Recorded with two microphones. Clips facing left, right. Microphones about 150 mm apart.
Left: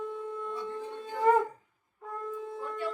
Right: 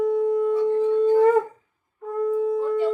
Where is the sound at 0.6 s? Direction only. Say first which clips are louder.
Right 19 dB; 70° right (ahead or behind).